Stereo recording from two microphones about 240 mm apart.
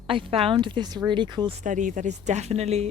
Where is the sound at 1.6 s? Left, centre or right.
Right.